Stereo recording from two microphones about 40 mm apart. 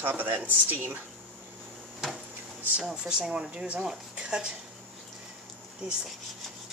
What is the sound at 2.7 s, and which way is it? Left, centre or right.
Speech, right.